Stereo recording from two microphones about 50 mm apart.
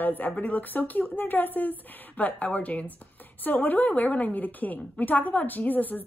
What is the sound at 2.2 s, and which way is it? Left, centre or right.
A woman's voice, left.